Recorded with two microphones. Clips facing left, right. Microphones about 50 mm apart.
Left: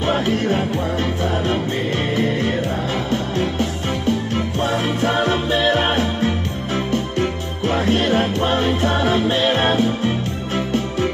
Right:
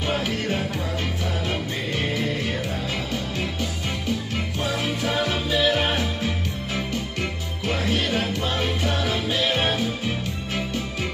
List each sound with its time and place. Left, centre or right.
0.0 s music: left